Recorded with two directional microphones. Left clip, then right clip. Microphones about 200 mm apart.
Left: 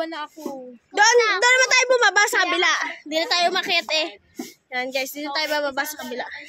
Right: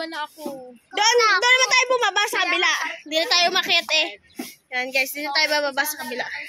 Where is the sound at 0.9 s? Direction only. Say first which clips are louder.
Left 1 dB; 25° left (ahead or behind); by 6.5 s 10° left (ahead or behind).